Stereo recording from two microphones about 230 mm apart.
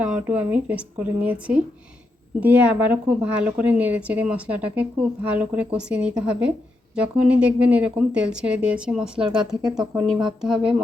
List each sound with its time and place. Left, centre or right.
0.0 s a woman's voice: centre
9.2 s speech: centre
9.7 s speech: centre